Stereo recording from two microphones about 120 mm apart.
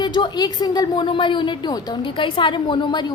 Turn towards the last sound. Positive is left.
turn(degrees=40)  # may be behind; listen again after turning